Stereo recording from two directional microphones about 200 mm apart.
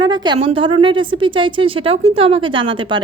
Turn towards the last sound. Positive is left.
turn(degrees=-25)  # may be behind; listen again after turning